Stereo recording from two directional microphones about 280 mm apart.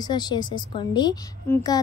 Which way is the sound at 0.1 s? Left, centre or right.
Centre.